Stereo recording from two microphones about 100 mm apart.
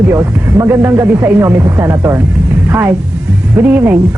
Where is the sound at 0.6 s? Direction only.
25° right (ahead or behind).